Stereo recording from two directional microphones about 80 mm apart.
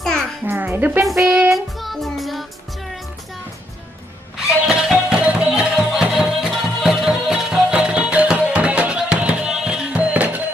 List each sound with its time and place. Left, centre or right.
0.5 s speech: right
1.2 s music: right
1.5 s music: centre
4.6 s music: centre